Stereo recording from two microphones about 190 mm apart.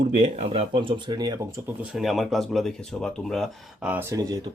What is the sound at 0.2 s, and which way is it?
Speech, 35° right (ahead or behind).